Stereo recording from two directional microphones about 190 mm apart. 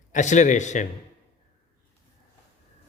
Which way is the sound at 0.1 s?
40° left (ahead or behind).